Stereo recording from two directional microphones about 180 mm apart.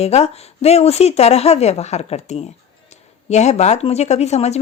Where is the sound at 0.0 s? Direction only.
35° left (ahead or behind).